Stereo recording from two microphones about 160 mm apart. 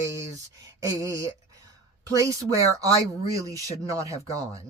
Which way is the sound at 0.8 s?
20° right (ahead or behind).